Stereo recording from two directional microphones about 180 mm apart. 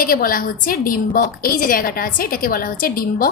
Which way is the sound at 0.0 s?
55° left (ahead or behind).